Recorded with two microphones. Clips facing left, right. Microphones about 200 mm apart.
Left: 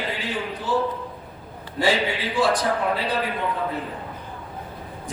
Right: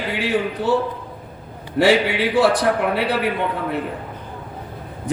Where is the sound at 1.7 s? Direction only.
70° right (ahead or behind).